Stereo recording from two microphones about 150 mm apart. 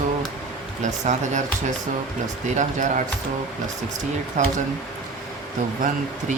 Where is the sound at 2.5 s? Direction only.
55° right (ahead or behind).